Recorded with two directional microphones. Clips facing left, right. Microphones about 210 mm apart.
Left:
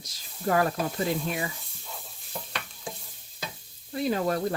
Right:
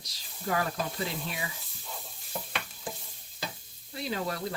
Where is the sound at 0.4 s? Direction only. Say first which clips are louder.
Left 6 dB; 45° left (ahead or behind).